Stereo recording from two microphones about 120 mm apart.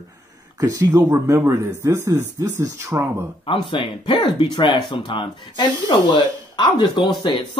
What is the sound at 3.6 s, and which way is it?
Speech, 45° left (ahead or behind).